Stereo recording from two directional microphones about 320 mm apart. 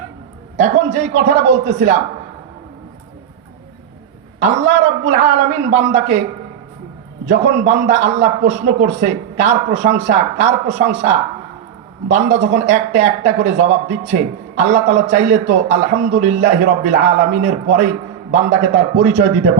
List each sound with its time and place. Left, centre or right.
0.5 s speech: right
4.4 s speech: right
7.3 s speech: right